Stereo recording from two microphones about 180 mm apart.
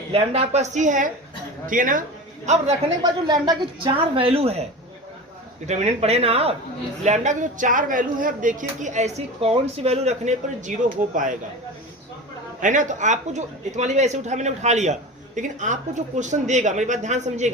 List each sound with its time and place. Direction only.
0.1 s speech: 35° right (ahead or behind)
3.0 s speech: 20° right (ahead or behind)
5.6 s speech: 40° right (ahead or behind)
12.6 s speech: 45° right (ahead or behind)